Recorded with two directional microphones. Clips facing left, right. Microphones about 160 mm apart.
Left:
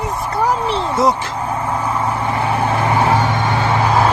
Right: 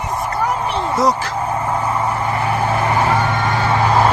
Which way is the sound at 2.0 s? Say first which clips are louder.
Even; 25° left (ahead or behind).